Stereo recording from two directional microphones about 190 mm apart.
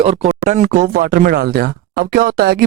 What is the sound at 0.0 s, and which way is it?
Speech, 35° right (ahead or behind).